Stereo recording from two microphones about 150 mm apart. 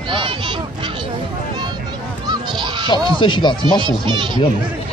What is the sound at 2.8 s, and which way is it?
Speech, 30° left (ahead or behind).